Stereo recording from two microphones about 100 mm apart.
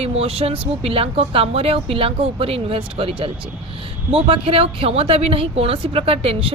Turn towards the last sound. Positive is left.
turn(degrees=-75)  # may be behind; listen again after turning